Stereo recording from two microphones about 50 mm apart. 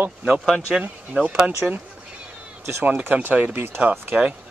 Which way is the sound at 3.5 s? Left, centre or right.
Right.